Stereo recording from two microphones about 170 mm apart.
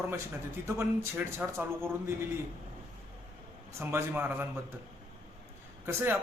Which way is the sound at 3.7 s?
15° right (ahead or behind).